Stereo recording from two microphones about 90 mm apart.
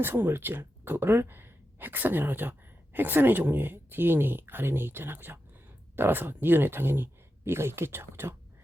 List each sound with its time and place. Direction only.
0.0 s speech: 25° right (ahead or behind)